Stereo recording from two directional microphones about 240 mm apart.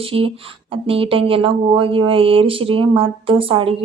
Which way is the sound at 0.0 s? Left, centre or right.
Right.